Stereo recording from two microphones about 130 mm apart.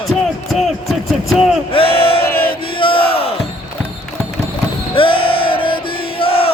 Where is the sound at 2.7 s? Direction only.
40° left (ahead or behind).